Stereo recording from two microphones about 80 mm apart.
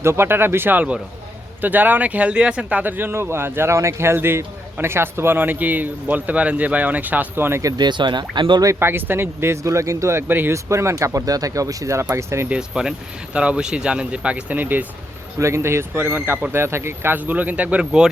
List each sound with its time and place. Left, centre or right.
0.0 s speech: right
7.8 s speech: right
8.6 s speech: right
10.5 s speech: right
12.5 s speech: centre
15.4 s speech: right; by 18.1 s centre